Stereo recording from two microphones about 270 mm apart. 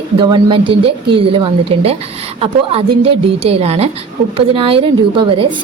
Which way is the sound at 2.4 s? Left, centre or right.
Right.